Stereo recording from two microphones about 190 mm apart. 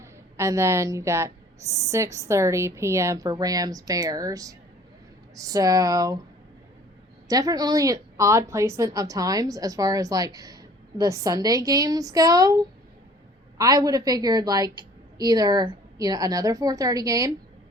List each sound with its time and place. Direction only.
0.0 s a woman's voice: 15° right (ahead or behind)
7.3 s a woman's voice: 20° right (ahead or behind)